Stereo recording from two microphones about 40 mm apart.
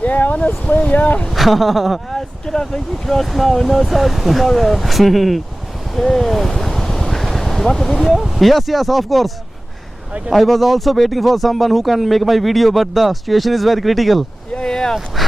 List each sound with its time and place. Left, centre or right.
0.0 s speech: left
1.3 s speech: centre
2.0 s speech: centre
5.9 s a sound: centre
8.1 s speech: centre
10.3 s speech: centre
14.5 s boat: centre
14.9 s speech: centre